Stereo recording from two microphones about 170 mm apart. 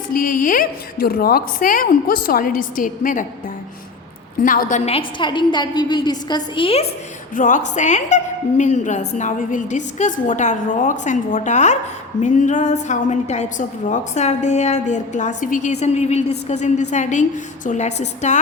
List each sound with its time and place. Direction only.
0.1 s a woman's voice: 55° left (ahead or behind)
4.4 s a woman's voice: 55° left (ahead or behind)
4.9 s a woman's voice: 30° left (ahead or behind)
7.3 s a woman's voice: 50° left (ahead or behind)